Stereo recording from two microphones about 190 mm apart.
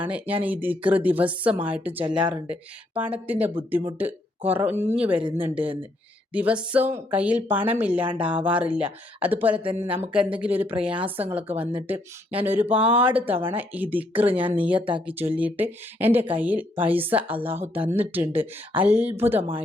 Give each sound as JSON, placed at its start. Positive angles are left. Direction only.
{"t": 0.0, "sound": "speech", "side_deg": -10}
{"t": 9.6, "sound": "speech", "side_deg": -30}
{"t": 9.9, "sound": "speech", "side_deg": -5}